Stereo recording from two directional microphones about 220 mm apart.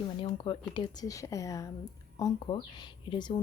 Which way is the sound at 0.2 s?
25° left (ahead or behind).